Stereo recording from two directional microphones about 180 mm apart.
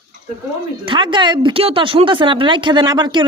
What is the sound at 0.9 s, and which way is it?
Speech, 25° right (ahead or behind).